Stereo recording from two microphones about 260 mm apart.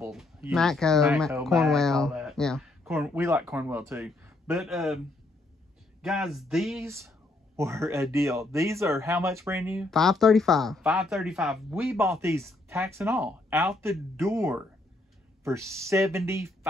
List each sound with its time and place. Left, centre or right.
0.0 s speech: centre
6.0 s speech: centre